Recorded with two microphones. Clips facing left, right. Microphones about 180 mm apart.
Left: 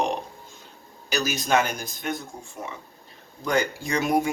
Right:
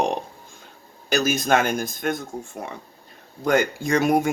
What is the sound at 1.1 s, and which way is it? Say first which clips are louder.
Speech: right 4 dB; 55° right (ahead or behind).